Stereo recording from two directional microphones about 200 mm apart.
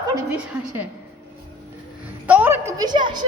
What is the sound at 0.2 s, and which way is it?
Speech, 10° right (ahead or behind).